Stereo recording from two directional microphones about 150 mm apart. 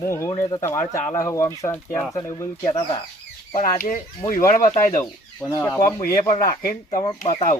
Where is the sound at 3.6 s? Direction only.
65° left (ahead or behind).